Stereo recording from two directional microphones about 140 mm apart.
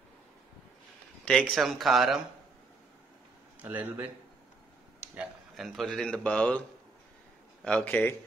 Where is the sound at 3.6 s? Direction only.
15° right (ahead or behind).